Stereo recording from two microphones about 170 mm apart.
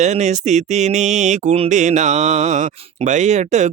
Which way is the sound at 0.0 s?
45° right (ahead or behind).